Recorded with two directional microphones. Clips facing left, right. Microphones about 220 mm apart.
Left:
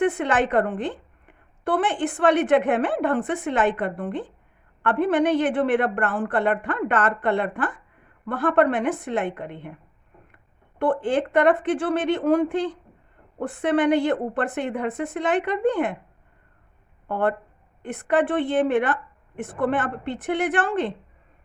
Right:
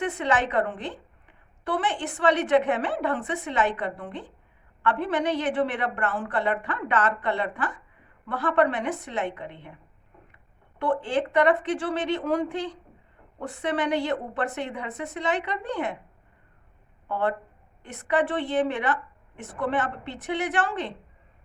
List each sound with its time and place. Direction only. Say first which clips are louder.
0.0 s a woman's voice: left 4 dB; 50° left (ahead or behind)
17.1 s a woman's voice: left 3 dB; 55° left (ahead or behind)